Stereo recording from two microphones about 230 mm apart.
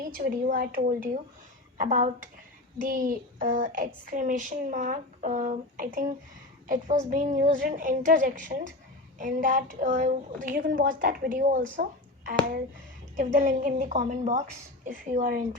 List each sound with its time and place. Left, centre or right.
0.0 s a woman's voice: right